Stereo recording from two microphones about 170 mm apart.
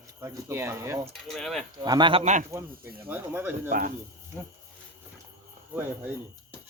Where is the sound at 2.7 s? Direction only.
60° right (ahead or behind).